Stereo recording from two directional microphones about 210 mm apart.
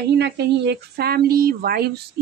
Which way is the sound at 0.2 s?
50° right (ahead or behind).